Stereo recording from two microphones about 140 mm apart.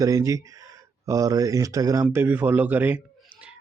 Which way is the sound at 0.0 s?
20° right (ahead or behind).